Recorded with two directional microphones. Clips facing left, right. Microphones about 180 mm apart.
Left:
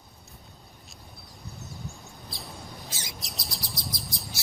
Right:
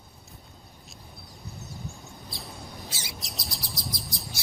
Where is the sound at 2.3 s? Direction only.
Centre (ahead or behind).